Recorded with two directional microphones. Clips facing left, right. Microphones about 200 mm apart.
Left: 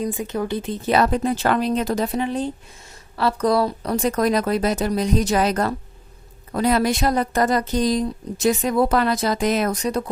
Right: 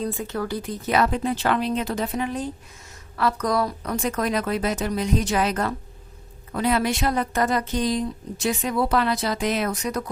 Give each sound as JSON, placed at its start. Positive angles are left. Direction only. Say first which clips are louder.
{"t": 0.0, "sound": "speech", "louder": "left 3 dB", "side_deg": 15}